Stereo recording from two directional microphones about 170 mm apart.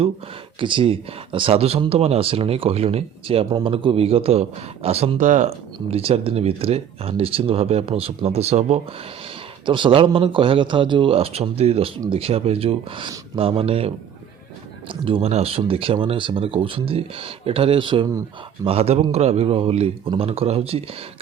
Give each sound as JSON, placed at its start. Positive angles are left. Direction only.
{"t": 0.6, "sound": "speech", "side_deg": -30}